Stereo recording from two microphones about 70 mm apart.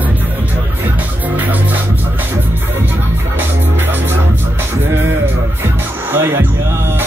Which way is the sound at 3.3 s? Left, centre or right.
Right.